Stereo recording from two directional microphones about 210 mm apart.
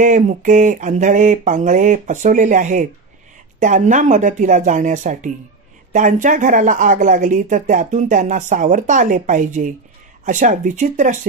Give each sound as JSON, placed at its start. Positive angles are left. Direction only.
{"t": 0.0, "sound": "speech", "side_deg": -35}